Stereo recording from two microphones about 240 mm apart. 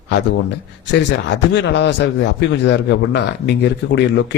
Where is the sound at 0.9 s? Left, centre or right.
Left.